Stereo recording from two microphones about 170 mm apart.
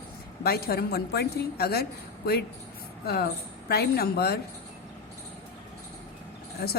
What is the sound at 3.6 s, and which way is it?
Speech, 65° left (ahead or behind).